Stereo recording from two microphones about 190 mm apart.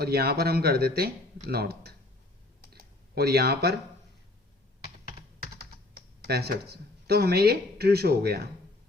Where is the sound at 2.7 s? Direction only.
55° right (ahead or behind).